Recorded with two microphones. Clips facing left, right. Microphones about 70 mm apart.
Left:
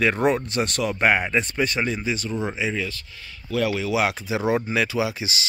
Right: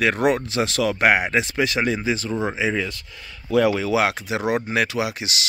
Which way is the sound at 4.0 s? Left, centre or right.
Right.